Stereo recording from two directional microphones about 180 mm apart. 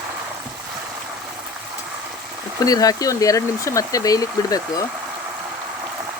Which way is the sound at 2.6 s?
20° left (ahead or behind).